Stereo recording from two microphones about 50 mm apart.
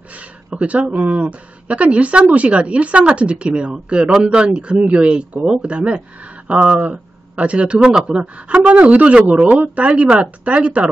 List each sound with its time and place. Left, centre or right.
0.6 s speech: right